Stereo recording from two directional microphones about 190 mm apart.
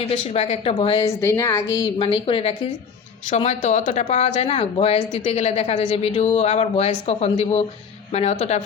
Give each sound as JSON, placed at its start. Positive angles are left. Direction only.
{"t": 0.3, "sound": "speech", "side_deg": 35}
{"t": 1.2, "sound": "a woman's voice", "side_deg": 15}
{"t": 1.7, "sound": "a woman's voice", "side_deg": 25}